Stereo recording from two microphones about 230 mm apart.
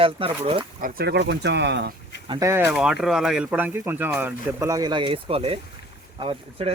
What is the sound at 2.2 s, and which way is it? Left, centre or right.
Speech, centre.